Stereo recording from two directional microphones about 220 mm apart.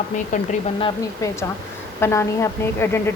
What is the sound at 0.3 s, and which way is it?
Speech, 35° left (ahead or behind).